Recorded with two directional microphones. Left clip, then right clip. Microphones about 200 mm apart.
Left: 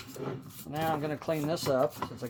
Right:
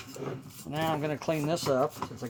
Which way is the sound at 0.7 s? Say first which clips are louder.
Right 1 dB; 50° right (ahead or behind).